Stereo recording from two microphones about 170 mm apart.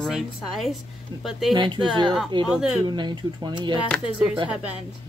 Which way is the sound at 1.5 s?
25° right (ahead or behind).